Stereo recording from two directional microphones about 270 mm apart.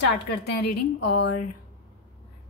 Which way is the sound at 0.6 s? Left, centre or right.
Left.